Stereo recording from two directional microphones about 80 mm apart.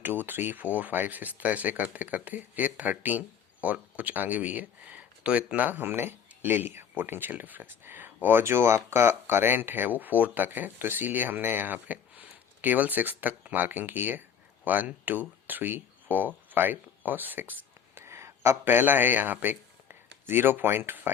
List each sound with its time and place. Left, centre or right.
0.0 s speech: right